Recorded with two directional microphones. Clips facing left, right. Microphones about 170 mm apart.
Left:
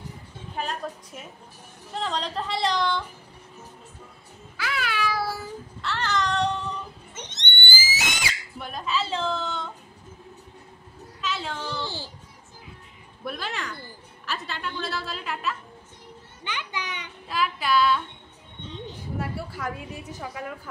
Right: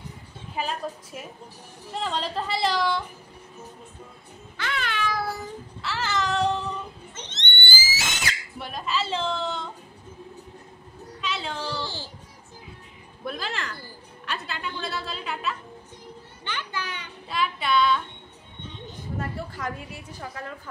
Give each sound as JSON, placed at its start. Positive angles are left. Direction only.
{"t": 0.6, "sound": "a woman's voice", "side_deg": -5}
{"t": 1.9, "sound": "a woman's voice", "side_deg": 0}
{"t": 4.6, "sound": "meow", "side_deg": 5}
{"t": 5.8, "sound": "child singing", "side_deg": -5}
{"t": 7.2, "sound": "pig", "side_deg": 15}
{"t": 8.5, "sound": "a woman's voice", "side_deg": 0}
{"t": 11.1, "sound": "a sound", "side_deg": 0}
{"t": 11.8, "sound": "a child's voice", "side_deg": 15}
{"t": 13.2, "sound": "a woman's voice", "side_deg": 0}
{"t": 16.4, "sound": "a child's voice", "side_deg": 15}
{"t": 17.3, "sound": "a woman's voice", "side_deg": 0}
{"t": 19.1, "sound": "a woman's voice", "side_deg": 10}
{"t": 19.9, "sound": "a child's voice", "side_deg": 20}